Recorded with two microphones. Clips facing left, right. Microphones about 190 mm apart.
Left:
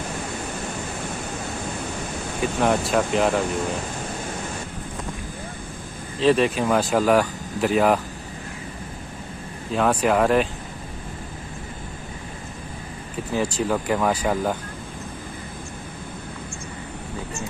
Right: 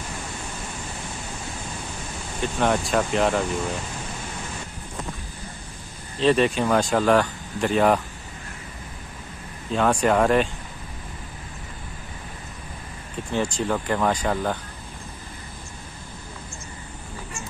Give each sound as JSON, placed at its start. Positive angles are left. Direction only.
{"t": 2.4, "sound": "speech", "side_deg": 0}
{"t": 6.1, "sound": "speech", "side_deg": 0}
{"t": 9.7, "sound": "speech", "side_deg": 5}
{"t": 13.3, "sound": "speech", "side_deg": 5}